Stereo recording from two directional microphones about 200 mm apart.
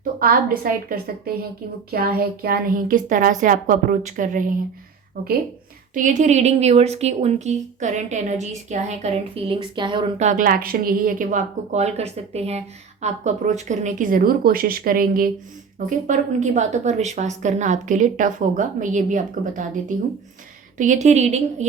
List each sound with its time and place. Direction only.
0.0 s a woman's voice: 45° right (ahead or behind)
5.9 s speech: 40° right (ahead or behind)
10.2 s speech: 40° right (ahead or behind)
20.7 s speech: 40° right (ahead or behind)